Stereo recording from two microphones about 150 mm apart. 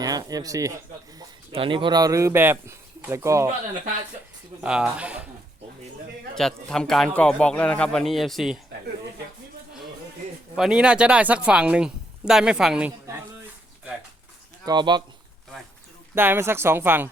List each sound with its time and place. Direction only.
0.0 s speech: 25° right (ahead or behind)
1.5 s speech: 35° right (ahead or behind); by 3.5 s 20° right (ahead or behind)
4.6 s speech: 5° right (ahead or behind)
6.3 s a man's voice: 5° left (ahead or behind)
10.5 s speech: 5° right (ahead or behind)
14.6 s speech: 30° right (ahead or behind)
16.1 s speech: 15° right (ahead or behind)